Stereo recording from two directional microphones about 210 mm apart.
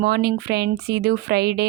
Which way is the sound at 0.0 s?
50° right (ahead or behind).